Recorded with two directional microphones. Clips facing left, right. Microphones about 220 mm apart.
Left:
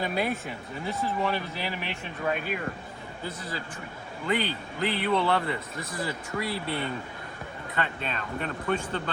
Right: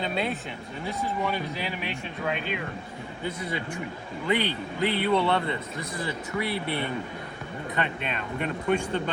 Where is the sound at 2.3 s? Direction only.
Centre (ahead or behind).